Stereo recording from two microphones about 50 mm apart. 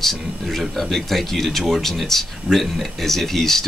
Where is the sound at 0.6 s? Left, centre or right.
Centre.